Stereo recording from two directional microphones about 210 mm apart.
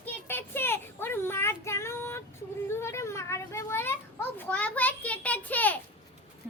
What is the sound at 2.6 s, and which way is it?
Children playing, 10° left (ahead or behind).